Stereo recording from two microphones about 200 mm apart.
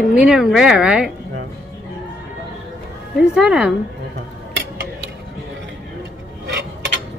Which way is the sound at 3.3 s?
5° right (ahead or behind).